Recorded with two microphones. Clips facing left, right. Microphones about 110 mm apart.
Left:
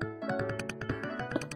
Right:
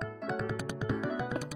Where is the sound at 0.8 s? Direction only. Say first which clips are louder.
Right 5 dB; 10° right (ahead or behind).